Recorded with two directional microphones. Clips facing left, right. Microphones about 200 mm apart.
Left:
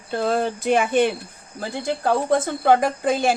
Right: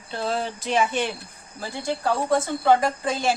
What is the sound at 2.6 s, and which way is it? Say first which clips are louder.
Speech: left 3 dB; 55° left (ahead or behind).